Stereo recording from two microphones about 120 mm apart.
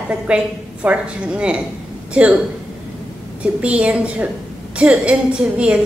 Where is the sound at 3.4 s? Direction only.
10° right (ahead or behind).